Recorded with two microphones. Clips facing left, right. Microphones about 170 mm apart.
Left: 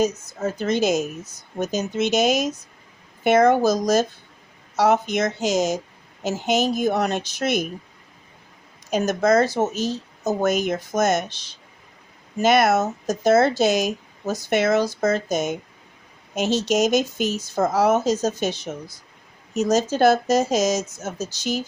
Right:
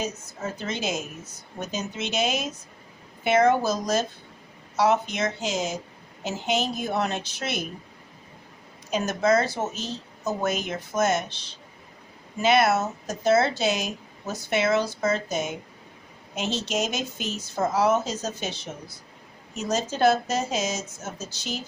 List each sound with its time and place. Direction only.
0.3 s speech: 40° left (ahead or behind)
8.9 s speech: 40° left (ahead or behind)